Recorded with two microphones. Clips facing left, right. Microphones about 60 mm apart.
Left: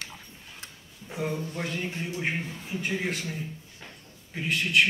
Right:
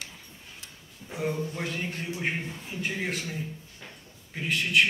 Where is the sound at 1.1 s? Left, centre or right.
Centre.